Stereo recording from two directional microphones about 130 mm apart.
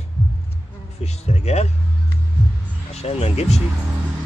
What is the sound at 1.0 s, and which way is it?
Speech, 55° left (ahead or behind).